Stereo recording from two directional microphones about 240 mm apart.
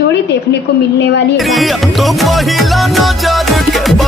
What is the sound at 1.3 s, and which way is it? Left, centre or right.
Music, centre.